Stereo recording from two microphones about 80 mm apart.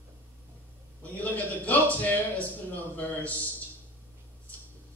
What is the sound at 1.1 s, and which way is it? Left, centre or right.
Speech, centre.